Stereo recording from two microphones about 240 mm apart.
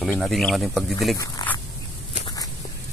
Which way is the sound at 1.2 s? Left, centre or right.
Centre.